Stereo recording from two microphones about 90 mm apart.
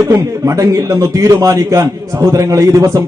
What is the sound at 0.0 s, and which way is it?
A man's voice, 35° right (ahead or behind).